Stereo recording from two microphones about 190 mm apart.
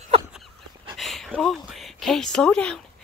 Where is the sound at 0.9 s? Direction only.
Centre (ahead or behind).